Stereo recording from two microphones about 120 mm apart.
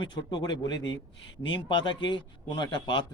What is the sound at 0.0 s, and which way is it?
Speech, 40° left (ahead or behind).